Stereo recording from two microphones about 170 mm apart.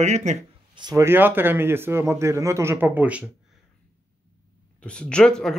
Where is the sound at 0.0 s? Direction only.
45° right (ahead or behind).